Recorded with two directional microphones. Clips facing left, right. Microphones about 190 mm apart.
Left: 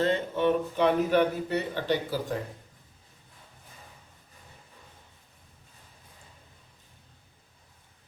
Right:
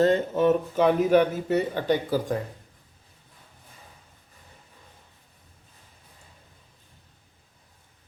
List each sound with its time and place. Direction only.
0.0 s speech: 45° right (ahead or behind)